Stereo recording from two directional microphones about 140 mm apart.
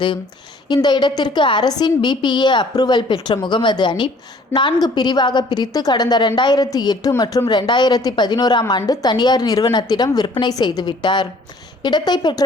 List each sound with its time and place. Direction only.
0.7 s a woman's voice: 30° left (ahead or behind)